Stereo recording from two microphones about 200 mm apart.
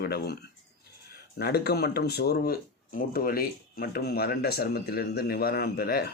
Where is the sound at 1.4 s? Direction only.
50° left (ahead or behind).